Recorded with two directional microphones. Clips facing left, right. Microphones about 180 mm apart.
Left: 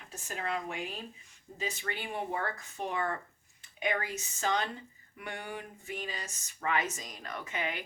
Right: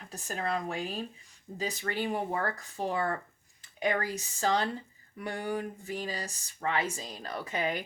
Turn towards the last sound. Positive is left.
turn(degrees=-35)  # may be behind; listen again after turning